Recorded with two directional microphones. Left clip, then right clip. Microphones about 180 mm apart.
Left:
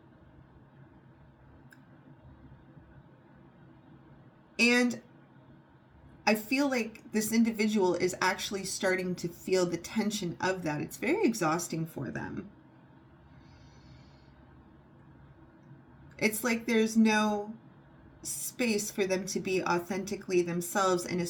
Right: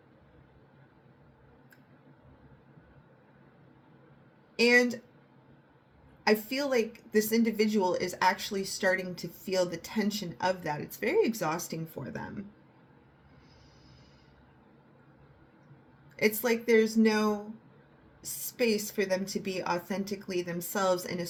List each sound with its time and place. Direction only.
4.5 s speech: 30° right (ahead or behind)
6.5 s speech: 30° right (ahead or behind)
16.1 s speech: 30° right (ahead or behind)